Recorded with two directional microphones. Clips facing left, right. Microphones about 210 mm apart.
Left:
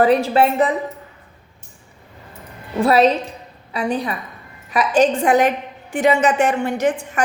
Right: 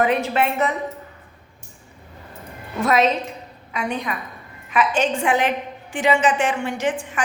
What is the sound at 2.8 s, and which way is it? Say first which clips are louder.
A woman's voice: left 4 dB; 35° left (ahead or behind).